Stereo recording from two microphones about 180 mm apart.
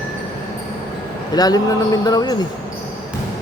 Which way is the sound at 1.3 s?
20° left (ahead or behind).